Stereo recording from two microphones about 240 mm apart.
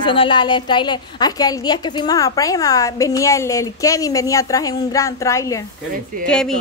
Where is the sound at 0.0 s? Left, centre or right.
Left.